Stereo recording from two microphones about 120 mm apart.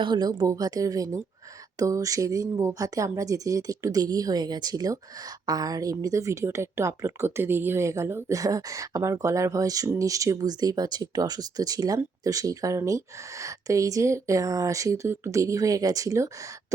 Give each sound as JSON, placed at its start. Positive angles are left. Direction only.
{"t": 0.0, "sound": "a woman's voice", "side_deg": -40}